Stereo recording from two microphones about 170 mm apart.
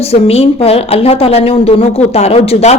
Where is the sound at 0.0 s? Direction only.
35° left (ahead or behind).